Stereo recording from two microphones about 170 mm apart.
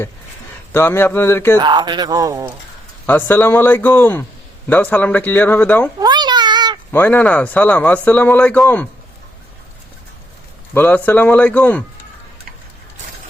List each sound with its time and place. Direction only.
0.7 s speech: 15° left (ahead or behind)
1.5 s speech: 25° right (ahead or behind)
3.1 s speech: 10° left (ahead or behind)
6.0 s a sound: 25° right (ahead or behind)
6.9 s speech: 10° left (ahead or behind)
10.8 s speech: 10° left (ahead or behind)